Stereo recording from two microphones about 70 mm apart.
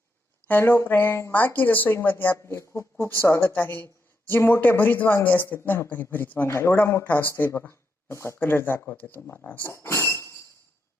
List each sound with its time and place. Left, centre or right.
0.6 s a woman's voice: left
2.6 s a woman's voice: left
6.5 s speech: left
7.0 s speech: left
8.4 s a woman's voice: left
9.7 s chink: left